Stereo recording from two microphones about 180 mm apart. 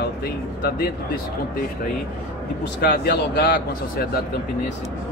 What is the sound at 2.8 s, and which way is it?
Speech, 60° left (ahead or behind).